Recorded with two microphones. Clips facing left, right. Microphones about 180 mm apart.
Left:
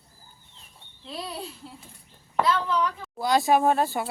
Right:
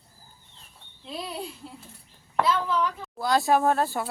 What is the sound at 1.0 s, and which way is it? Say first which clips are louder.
Speech: even; 15° right (ahead or behind).